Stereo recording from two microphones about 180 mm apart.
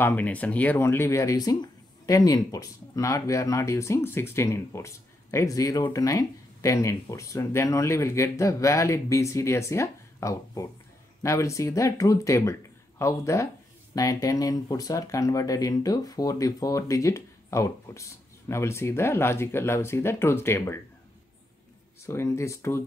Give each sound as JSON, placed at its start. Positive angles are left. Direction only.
{"t": 0.0, "sound": "speech", "side_deg": 10}
{"t": 22.0, "sound": "speech", "side_deg": 15}